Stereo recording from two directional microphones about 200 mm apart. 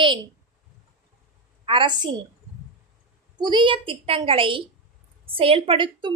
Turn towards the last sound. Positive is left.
turn(degrees=-25)  # may be behind; listen again after turning